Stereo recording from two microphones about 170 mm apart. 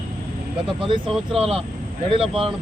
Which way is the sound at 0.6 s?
30° right (ahead or behind).